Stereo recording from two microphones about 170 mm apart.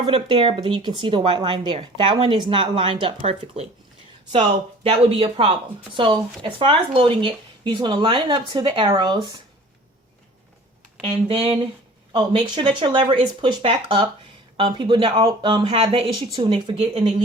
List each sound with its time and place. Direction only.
0.0 s speech: 30° right (ahead or behind)
11.0 s speech: 35° right (ahead or behind)